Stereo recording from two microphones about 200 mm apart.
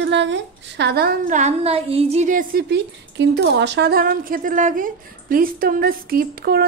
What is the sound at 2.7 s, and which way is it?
Speech, 60° right (ahead or behind).